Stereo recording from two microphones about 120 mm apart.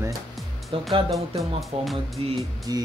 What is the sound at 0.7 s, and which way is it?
Speech, 45° right (ahead or behind).